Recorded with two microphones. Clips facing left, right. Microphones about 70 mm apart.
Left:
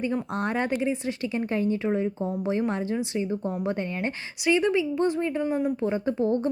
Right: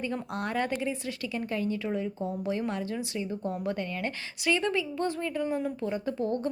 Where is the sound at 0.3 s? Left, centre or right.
Left.